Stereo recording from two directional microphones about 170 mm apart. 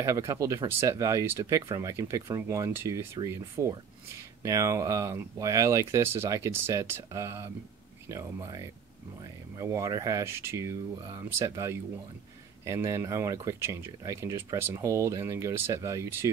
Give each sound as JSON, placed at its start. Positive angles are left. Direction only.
{"t": 0.0, "sound": "speech", "side_deg": -20}